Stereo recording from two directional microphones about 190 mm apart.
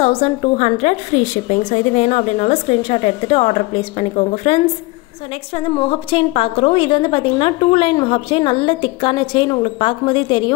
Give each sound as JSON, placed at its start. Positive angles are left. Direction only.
{"t": 0.0, "sound": "a woman's voice", "side_deg": 30}